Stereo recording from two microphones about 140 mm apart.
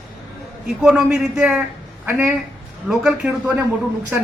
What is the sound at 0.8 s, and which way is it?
A woman's voice, 5° right (ahead or behind).